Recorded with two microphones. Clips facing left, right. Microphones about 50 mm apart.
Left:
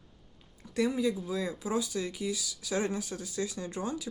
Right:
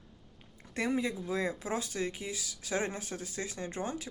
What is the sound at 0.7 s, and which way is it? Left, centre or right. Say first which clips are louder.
Speech: left 3 dB; right.